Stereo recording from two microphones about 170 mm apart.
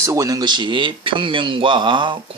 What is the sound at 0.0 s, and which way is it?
Speech, 20° right (ahead or behind).